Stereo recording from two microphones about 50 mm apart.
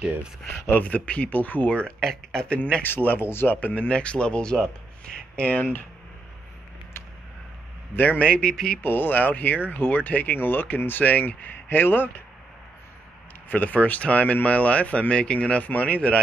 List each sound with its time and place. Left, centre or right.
0.7 s speech: left
1.9 s speech: centre
2.5 s speech: left
2.8 s speech: left
7.9 s a man's voice: left
8.2 s speech: left
8.8 s speech: left
13.5 s speech: left